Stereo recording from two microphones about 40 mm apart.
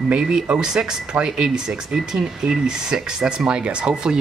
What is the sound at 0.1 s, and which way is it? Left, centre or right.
Speech, centre.